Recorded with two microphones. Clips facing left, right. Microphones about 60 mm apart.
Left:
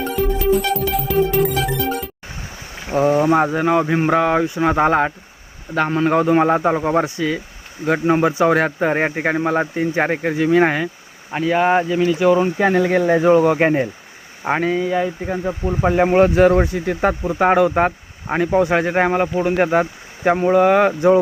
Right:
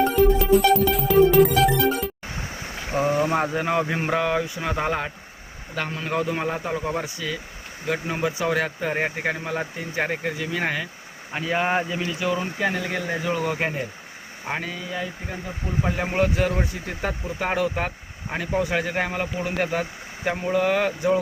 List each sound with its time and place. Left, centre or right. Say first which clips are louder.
0.2 s music: left 1 dB; centre
2.9 s speech: left 7 dB; centre
4.3 s speech: left 8 dB; left
7.9 s speech: left 9 dB; left
11.3 s speech: left 7 dB; centre
12.0 s speech: left 11 dB; left
16.6 s speech: left 10 dB; left